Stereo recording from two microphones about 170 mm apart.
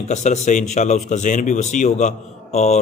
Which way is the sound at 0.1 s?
45° left (ahead or behind).